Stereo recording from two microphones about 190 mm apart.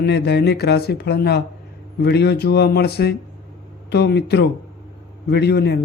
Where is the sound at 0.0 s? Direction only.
60° left (ahead or behind).